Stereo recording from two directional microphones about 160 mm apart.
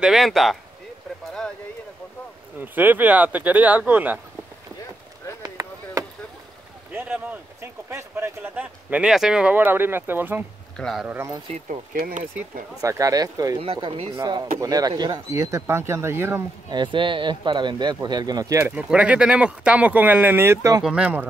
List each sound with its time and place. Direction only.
0.0 s speech: centre (ahead or behind)
2.6 s speech: 10° right (ahead or behind)
5.4 s chop: 20° right (ahead or behind)
6.9 s speech: 10° right (ahead or behind)
10.8 s speech: centre (ahead or behind)
11.1 s speech: 15° right (ahead or behind)
11.9 s speech: 50° right (ahead or behind)
12.8 s speech: 20° right (ahead or behind)
13.6 s speech: 35° right (ahead or behind); by 16.4 s 15° right (ahead or behind)
16.7 s speech: 30° right (ahead or behind)
18.8 s speech: 10° right (ahead or behind)
20.8 s speech: 5° right (ahead or behind)